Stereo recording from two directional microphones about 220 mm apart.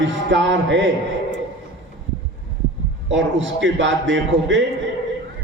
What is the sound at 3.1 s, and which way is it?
A man's voice, 60° right (ahead or behind).